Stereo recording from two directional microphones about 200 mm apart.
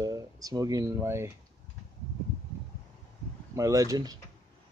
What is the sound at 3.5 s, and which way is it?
Speech, 15° right (ahead or behind).